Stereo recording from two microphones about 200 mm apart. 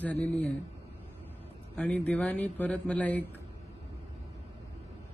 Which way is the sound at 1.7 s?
5° left (ahead or behind).